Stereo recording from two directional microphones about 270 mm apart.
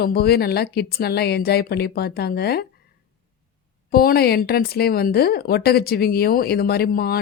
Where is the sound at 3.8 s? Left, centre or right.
Left.